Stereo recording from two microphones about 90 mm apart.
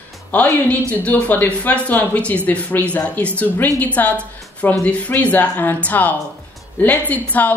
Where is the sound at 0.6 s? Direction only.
15° left (ahead or behind).